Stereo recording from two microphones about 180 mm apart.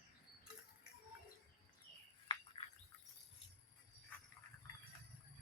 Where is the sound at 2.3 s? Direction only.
25° left (ahead or behind).